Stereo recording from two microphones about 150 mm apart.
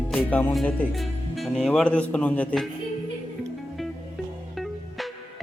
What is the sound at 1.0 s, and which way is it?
Speech, centre (ahead or behind).